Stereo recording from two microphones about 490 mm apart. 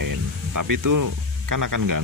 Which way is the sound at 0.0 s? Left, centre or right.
Right.